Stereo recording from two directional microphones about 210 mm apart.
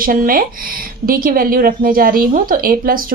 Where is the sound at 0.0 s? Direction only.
40° right (ahead or behind).